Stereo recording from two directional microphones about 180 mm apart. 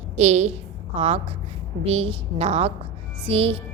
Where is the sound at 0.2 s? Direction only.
40° right (ahead or behind).